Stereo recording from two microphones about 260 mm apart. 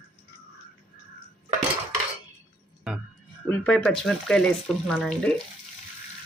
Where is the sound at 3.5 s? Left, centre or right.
Centre.